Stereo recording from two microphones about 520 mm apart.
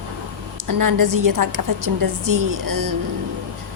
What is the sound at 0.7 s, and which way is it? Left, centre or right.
A woman's voice, right.